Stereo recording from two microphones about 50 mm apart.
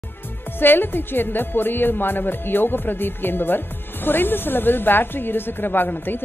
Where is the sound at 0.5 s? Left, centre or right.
Left.